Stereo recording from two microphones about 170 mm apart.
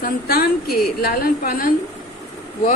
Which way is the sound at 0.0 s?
60° left (ahead or behind).